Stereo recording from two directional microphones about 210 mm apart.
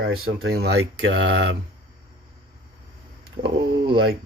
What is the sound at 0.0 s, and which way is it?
Speech, 50° right (ahead or behind).